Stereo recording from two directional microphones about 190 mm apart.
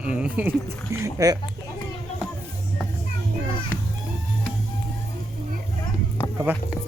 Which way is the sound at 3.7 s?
10° left (ahead or behind).